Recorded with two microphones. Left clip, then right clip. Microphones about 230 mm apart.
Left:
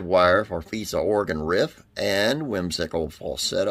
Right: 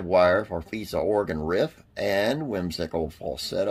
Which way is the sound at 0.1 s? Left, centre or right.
Left.